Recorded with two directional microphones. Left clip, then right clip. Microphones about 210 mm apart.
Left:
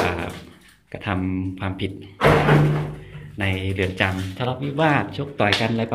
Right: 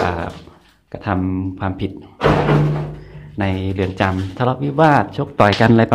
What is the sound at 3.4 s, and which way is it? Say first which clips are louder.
Speech: right 3 dB; 15° right (ahead or behind).